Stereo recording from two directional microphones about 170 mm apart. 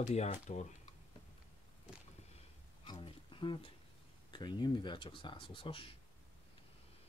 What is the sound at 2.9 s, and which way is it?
Music, 30° left (ahead or behind).